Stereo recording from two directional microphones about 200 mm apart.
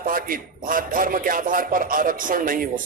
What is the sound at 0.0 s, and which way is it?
A man's voice, 45° right (ahead or behind).